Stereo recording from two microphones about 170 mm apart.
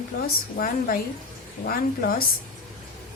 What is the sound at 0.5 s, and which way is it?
A woman's voice, 55° left (ahead or behind).